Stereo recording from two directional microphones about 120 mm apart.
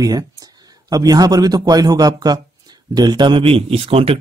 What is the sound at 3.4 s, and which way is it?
Speech, 55° right (ahead or behind).